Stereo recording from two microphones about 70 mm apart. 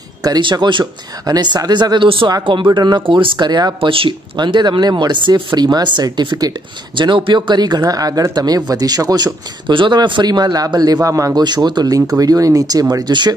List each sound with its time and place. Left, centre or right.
0.2 s speech: right
1.2 s speech: right
7.1 s speech: right
9.8 s speech: right
11.3 s speech: right
13.0 s speech: right